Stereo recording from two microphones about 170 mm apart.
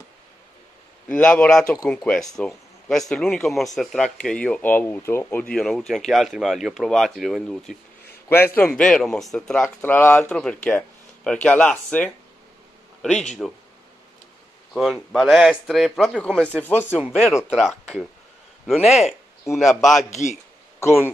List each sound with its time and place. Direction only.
1.0 s speech: 5° left (ahead or behind)
13.4 s speech: centre (ahead or behind)
14.7 s speech: centre (ahead or behind)
17.0 s speech: 5° right (ahead or behind)
20.1 s a man's voice: 45° left (ahead or behind)